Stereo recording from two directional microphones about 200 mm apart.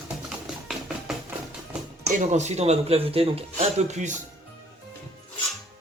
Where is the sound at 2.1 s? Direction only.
35° right (ahead or behind).